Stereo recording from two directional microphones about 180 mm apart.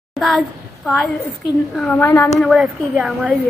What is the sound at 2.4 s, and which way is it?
Speech, centre (ahead or behind).